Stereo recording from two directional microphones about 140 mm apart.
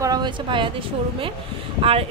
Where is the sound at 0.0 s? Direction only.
30° right (ahead or behind).